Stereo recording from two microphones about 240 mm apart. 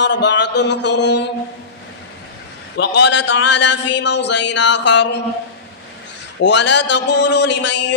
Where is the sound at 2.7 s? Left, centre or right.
Left.